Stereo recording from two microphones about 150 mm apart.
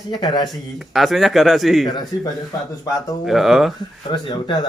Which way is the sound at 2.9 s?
Centre (ahead or behind).